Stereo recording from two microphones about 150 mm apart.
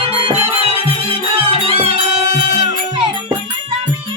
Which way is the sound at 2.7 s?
35° right (ahead or behind).